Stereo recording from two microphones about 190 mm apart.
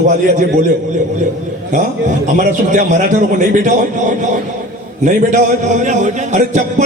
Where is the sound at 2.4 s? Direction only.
40° right (ahead or behind).